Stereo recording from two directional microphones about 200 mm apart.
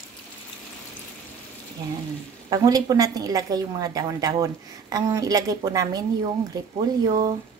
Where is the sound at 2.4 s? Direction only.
20° right (ahead or behind).